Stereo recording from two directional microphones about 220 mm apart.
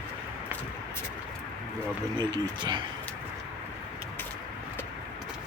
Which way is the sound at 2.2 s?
20° right (ahead or behind).